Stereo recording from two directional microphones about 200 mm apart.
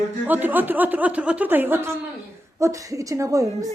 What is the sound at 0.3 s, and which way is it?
Speech, 10° right (ahead or behind).